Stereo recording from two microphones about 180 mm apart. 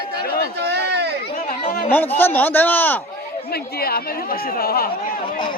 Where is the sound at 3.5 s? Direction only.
55° left (ahead or behind).